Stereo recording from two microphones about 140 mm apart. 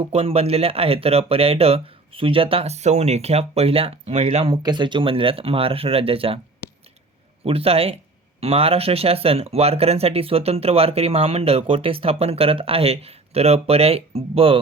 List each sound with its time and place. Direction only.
0.0 s speech: 45° right (ahead or behind)
4.5 s speech: 30° right (ahead or behind)
7.4 s speech: 45° right (ahead or behind)